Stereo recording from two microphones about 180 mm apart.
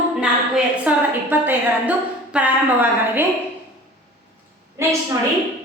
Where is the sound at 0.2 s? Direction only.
5° right (ahead or behind).